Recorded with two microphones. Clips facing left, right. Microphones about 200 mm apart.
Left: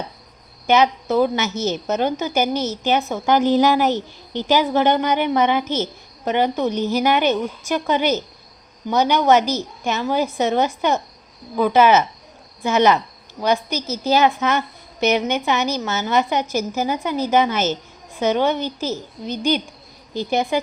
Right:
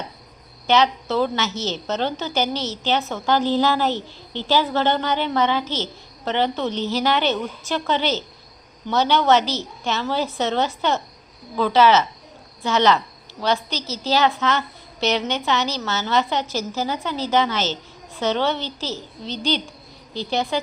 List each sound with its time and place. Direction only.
0.7 s a woman's voice: 15° left (ahead or behind)